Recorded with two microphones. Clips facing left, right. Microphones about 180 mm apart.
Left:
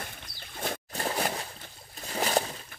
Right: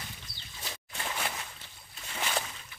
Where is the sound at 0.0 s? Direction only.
55° left (ahead or behind).